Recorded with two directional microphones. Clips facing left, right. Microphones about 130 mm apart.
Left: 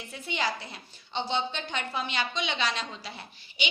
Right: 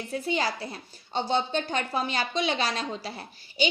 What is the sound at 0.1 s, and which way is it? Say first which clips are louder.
A woman's voice: right 4 dB; 40° right (ahead or behind).